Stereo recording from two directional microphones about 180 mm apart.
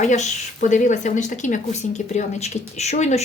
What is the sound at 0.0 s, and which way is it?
A woman's voice, 40° left (ahead or behind).